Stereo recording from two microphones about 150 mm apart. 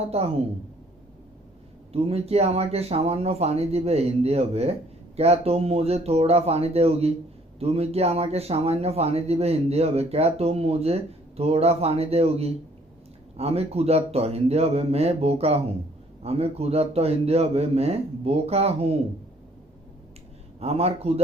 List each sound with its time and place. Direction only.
0.1 s speech: 45° right (ahead or behind)
1.9 s speech: 40° right (ahead or behind)
20.6 s speech: 45° right (ahead or behind)